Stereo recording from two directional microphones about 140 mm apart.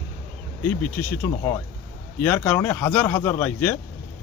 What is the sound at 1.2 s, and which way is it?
Speech, 20° left (ahead or behind).